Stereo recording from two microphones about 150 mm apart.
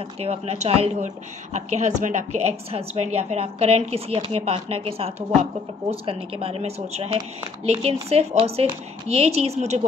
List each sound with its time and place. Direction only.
0.2 s speech: 45° right (ahead or behind)